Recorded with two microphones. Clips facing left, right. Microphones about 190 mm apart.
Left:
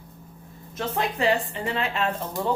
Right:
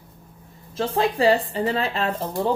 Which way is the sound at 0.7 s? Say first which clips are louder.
Right 5 dB; 30° right (ahead or behind).